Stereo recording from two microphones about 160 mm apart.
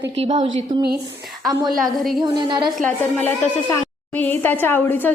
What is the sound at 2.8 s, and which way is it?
A woman's voice, 10° left (ahead or behind).